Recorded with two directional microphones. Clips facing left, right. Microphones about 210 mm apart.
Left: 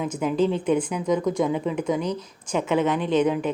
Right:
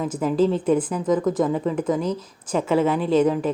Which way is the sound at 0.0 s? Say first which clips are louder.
Right 2 dB; centre (ahead or behind).